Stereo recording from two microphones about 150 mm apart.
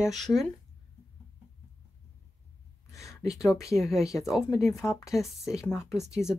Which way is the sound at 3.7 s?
Centre (ahead or behind).